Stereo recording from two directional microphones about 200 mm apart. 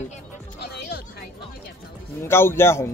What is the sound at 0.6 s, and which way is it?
Music, 55° left (ahead or behind).